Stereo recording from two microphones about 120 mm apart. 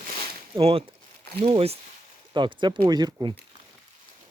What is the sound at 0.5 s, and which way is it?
Speech, 50° right (ahead or behind).